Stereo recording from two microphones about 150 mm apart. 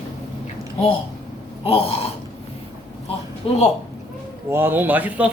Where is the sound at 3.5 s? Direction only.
40° left (ahead or behind).